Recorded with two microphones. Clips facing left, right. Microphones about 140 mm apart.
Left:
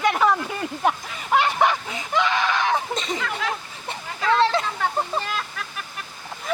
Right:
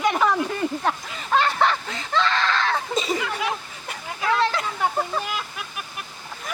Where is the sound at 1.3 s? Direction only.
15° left (ahead or behind).